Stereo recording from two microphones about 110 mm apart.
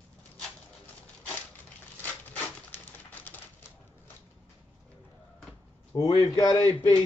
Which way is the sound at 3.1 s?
15° left (ahead or behind).